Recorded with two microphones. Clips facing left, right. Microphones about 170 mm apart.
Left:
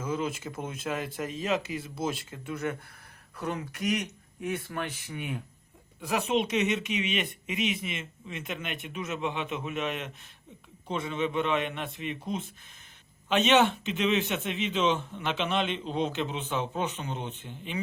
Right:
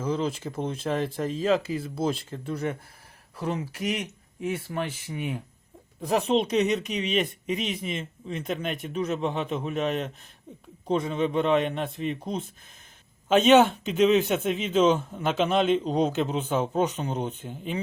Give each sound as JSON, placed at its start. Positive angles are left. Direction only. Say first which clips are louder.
{"t": 0.0, "sound": "a man's voice", "louder": "right 4 dB", "side_deg": -35}